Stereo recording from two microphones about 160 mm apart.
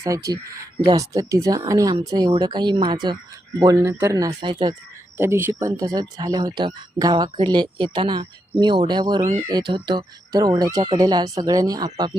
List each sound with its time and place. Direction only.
0.1 s speech: 20° right (ahead or behind)
4.4 s speech: 30° right (ahead or behind)
5.1 s speech: 15° right (ahead or behind)